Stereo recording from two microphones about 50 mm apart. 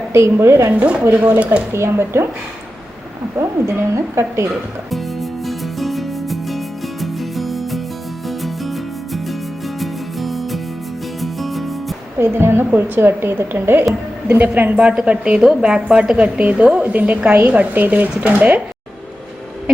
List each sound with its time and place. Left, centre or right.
0.1 s a woman's voice: right
0.7 s a woman's voice: right
1.2 s a woman's voice: right
1.7 s a woman's voice: right
3.3 s a woman's voice: right
5.5 s music: centre
9.8 s music: centre
12.2 s a woman's voice: right
14.8 s a woman's voice: right
17.3 s a woman's voice: right